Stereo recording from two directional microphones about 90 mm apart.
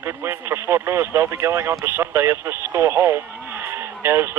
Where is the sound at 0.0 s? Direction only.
25° right (ahead or behind).